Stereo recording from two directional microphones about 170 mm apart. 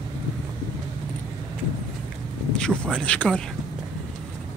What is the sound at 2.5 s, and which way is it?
Speech, 5° left (ahead or behind).